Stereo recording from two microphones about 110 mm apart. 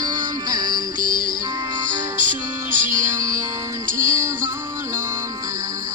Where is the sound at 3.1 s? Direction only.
30° right (ahead or behind).